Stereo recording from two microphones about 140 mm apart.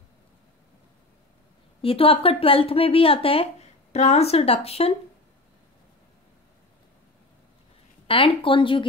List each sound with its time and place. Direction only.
1.8 s speech: 40° left (ahead or behind)
8.1 s speech: 40° left (ahead or behind)